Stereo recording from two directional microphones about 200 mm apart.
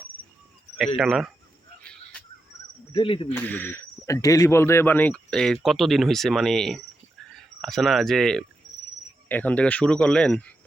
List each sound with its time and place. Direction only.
0.9 s speech: centre (ahead or behind)
1.8 s a sound: 5° left (ahead or behind)
2.9 s speech: 25° left (ahead or behind)
3.3 s speech: 10° left (ahead or behind)